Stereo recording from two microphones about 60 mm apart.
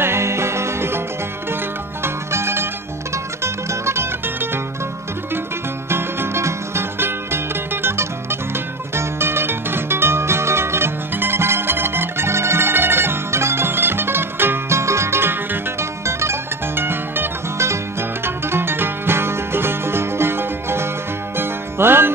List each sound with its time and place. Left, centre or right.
0.0 s music: right
2.3 s music: right
5.9 s music: right
14.8 s music: right